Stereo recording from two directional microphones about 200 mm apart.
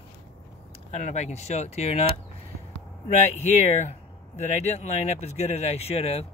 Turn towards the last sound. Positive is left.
turn(degrees=30)  # may be behind; listen again after turning